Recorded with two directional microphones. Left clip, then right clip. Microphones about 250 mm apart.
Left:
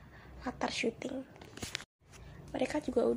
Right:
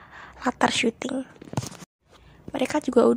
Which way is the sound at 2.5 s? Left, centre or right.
Right.